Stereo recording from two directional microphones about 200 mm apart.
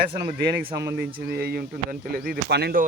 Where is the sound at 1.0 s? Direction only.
50° right (ahead or behind).